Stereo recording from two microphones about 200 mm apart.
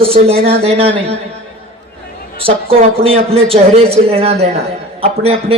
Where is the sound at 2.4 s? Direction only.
30° right (ahead or behind).